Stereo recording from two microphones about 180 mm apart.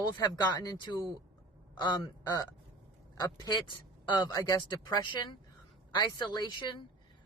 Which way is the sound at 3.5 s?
25° left (ahead or behind).